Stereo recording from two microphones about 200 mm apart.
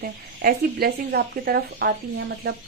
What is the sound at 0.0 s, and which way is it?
Speech, 50° right (ahead or behind).